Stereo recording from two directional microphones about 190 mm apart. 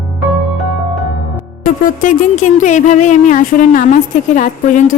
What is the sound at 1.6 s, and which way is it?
Speech, 45° left (ahead or behind).